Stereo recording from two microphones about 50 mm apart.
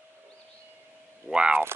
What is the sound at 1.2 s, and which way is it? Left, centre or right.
Speech, centre.